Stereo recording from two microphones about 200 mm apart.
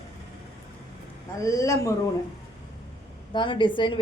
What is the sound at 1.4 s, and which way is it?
Speech, 15° left (ahead or behind).